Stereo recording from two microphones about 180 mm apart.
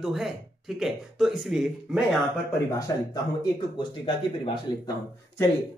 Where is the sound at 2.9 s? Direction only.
20° left (ahead or behind).